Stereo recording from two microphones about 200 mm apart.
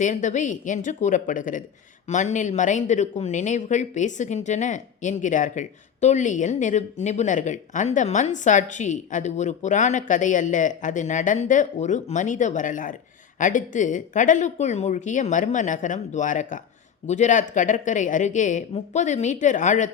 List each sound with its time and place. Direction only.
0.0 s speech: 40° left (ahead or behind)